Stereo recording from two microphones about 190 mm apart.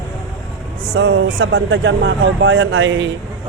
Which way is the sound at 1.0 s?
90° right.